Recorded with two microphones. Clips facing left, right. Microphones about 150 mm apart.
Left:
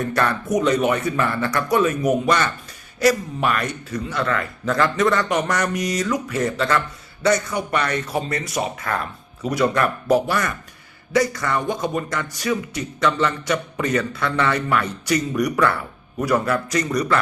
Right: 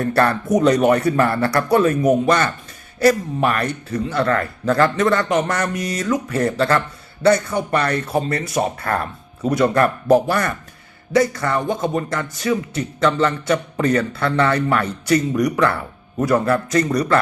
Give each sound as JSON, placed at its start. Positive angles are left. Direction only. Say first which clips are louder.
{"t": 0.1, "sound": "speech", "louder": "right 6 dB", "side_deg": -35}
{"t": 8.6, "sound": "speech", "louder": "right 4 dB", "side_deg": -40}
{"t": 9.4, "sound": "speech", "louder": "right 3 dB", "side_deg": -30}